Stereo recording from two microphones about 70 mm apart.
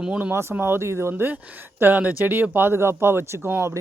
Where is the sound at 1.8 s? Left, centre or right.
Right.